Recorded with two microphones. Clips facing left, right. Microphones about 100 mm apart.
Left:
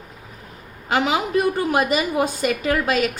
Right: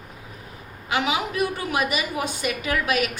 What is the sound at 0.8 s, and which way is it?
A woman's voice, 40° left (ahead or behind).